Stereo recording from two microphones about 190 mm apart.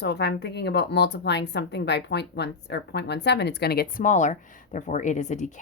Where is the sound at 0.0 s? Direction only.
60° left (ahead or behind).